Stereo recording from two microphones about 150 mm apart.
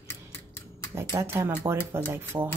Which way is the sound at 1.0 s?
20° right (ahead or behind).